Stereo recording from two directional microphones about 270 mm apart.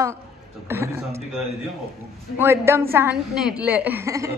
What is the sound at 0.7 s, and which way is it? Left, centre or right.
A woman's voice, centre.